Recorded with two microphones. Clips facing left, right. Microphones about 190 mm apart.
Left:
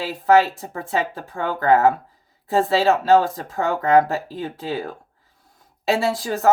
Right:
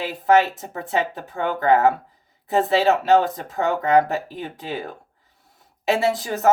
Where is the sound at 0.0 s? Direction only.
20° right (ahead or behind).